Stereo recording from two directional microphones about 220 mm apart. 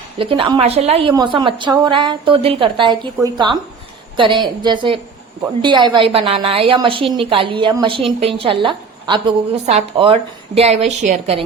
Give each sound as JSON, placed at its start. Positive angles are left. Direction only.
{"t": 0.2, "sound": "a woman's voice", "side_deg": -25}